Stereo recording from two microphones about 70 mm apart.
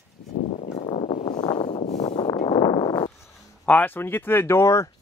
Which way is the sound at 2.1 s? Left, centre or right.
Left.